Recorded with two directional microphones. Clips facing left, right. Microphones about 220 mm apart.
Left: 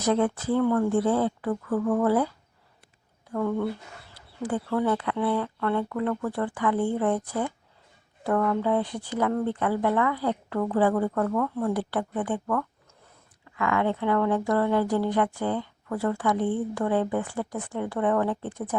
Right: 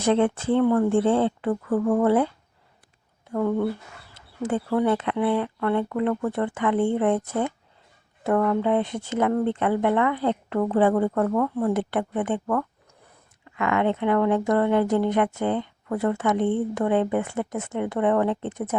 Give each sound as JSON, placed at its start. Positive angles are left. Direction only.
{"t": 0.0, "sound": "speech", "side_deg": -25}